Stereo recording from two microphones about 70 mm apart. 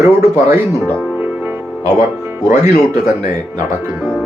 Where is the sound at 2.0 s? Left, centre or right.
Right.